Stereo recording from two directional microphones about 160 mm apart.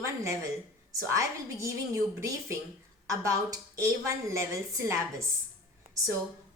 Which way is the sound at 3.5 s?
20° right (ahead or behind).